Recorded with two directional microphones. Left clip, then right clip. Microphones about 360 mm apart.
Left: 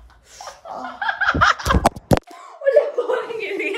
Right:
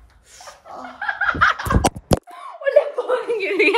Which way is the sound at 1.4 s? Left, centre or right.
Centre.